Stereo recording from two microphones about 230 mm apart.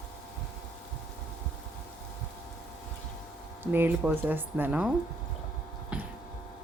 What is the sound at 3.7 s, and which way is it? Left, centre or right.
Speech, centre.